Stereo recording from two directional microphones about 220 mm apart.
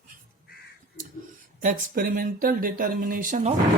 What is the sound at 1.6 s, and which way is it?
Speech, 35° right (ahead or behind).